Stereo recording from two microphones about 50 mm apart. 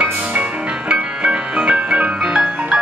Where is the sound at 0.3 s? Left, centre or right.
Right.